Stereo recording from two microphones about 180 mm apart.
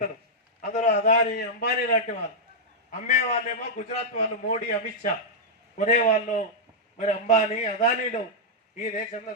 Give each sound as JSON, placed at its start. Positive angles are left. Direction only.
{"t": 0.6, "sound": "a sound", "side_deg": 45}
{"t": 0.9, "sound": "a man's voice", "side_deg": 50}
{"t": 5.7, "sound": "a man's voice", "side_deg": 45}